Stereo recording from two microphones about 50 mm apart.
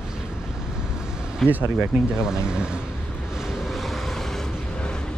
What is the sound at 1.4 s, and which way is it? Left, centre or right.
Speech, centre.